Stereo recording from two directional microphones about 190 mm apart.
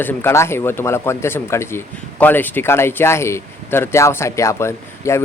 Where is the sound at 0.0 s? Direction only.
10° left (ahead or behind).